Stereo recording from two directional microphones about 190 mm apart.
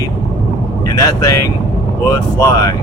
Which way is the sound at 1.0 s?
15° left (ahead or behind).